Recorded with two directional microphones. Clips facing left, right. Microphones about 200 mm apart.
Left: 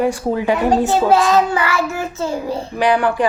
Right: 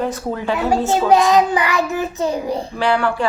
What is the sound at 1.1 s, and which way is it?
Child singing, 15° right (ahead or behind).